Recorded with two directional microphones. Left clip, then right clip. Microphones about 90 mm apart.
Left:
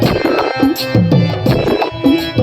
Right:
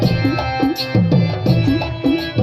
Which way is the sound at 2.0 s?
30° left (ahead or behind).